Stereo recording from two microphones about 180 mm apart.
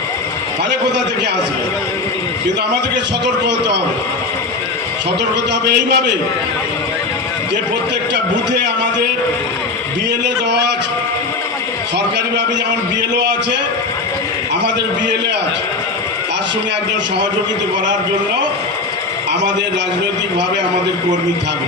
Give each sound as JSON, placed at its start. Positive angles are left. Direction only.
{"t": 5.6, "sound": "a man's voice", "side_deg": -65}
{"t": 8.1, "sound": "a man's voice", "side_deg": -75}
{"t": 13.1, "sound": "a man's voice", "side_deg": -75}